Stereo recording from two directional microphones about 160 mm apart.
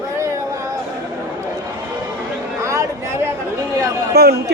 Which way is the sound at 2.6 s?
20° right (ahead or behind).